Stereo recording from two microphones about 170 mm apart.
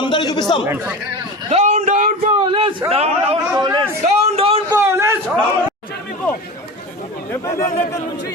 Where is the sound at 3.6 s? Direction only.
25° right (ahead or behind).